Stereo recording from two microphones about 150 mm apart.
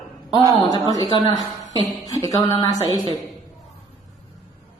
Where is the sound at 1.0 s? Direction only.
30° left (ahead or behind).